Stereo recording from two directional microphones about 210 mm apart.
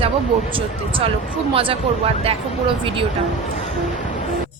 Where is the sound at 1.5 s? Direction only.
25° right (ahead or behind).